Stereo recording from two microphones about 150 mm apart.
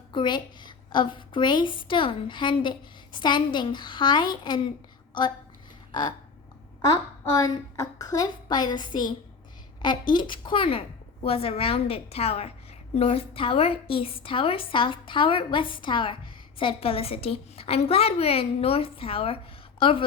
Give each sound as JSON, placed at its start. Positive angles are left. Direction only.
{"t": 0.1, "sound": "a woman's voice", "side_deg": 30}
{"t": 5.9, "sound": "a sound", "side_deg": 30}
{"t": 6.9, "sound": "a woman's voice", "side_deg": 25}